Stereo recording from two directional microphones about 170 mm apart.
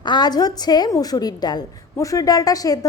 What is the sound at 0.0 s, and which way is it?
A woman's voice, 25° left (ahead or behind).